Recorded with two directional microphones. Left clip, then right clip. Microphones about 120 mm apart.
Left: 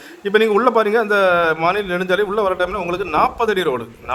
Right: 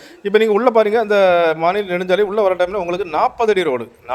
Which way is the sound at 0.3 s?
35° right (ahead or behind).